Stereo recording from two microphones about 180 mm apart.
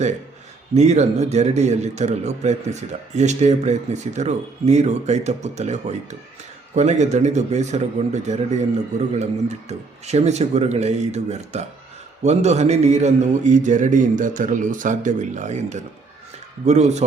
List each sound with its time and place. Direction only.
0.7 s a man's voice: 40° right (ahead or behind)